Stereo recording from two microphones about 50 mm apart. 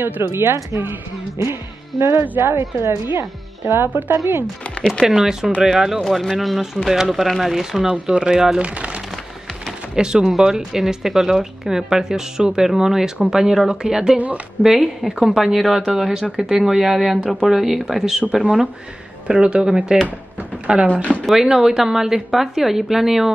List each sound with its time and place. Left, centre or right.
0.2 s speech: right
2.2 s speech: right
5.0 s a woman's voice: centre
7.8 s a woman's voice: centre
8.6 s speech: right
9.9 s a woman's voice: centre
14.1 s speech: right
14.6 s a woman's voice: centre
19.2 s a woman's voice: centre
20.3 s a sound: right
20.9 s speech: left
21.4 s a woman's voice: centre